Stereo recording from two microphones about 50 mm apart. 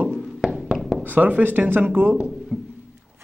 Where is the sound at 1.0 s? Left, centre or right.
Right.